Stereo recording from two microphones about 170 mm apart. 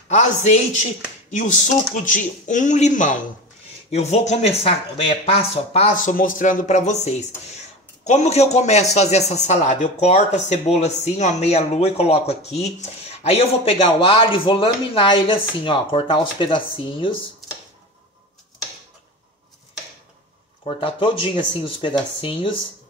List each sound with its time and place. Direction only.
0.1 s a man's voice: 45° left (ahead or behind)
20.6 s a man's voice: 30° left (ahead or behind)